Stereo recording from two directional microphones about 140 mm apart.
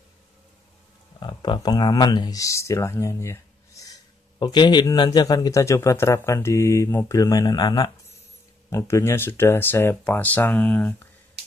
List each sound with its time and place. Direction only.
1.2 s speech: 30° left (ahead or behind); by 11.1 s 10° left (ahead or behind)